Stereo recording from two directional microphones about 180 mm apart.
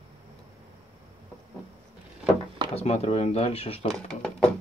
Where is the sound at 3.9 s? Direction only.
Centre (ahead or behind).